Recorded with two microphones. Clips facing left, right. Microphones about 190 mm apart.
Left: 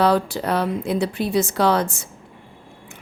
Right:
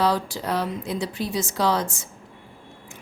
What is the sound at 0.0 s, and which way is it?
A woman's voice, 60° left (ahead or behind).